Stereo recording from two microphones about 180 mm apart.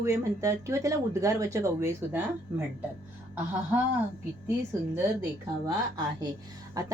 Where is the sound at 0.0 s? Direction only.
15° right (ahead or behind).